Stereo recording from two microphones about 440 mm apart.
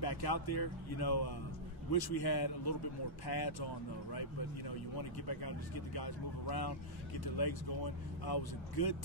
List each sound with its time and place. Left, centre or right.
0.0 s speech: left